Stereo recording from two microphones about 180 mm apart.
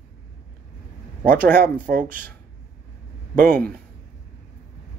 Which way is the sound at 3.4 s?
10° left (ahead or behind).